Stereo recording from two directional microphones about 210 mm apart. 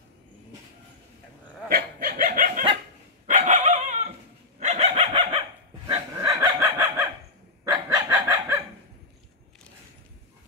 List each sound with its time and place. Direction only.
1.7 s a sound: 45° right (ahead or behind)
3.3 s dog: 35° right (ahead or behind)
4.6 s chicken: 30° right (ahead or behind)
5.9 s dog: 20° right (ahead or behind)
7.7 s chicken: 15° right (ahead or behind)